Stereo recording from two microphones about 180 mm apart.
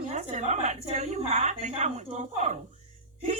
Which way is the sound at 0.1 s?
40° right (ahead or behind).